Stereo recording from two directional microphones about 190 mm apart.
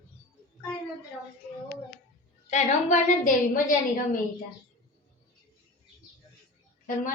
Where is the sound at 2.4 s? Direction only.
40° left (ahead or behind).